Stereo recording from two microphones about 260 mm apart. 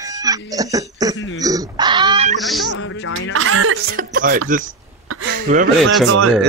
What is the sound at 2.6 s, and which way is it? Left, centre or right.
Music, left.